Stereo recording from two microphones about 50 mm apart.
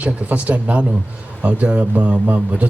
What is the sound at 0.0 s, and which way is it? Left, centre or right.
A man's voice, right.